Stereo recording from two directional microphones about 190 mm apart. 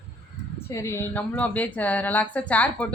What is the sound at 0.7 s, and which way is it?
Speech, 15° left (ahead or behind).